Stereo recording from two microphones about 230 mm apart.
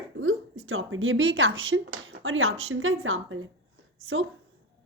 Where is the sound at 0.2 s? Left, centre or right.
Right.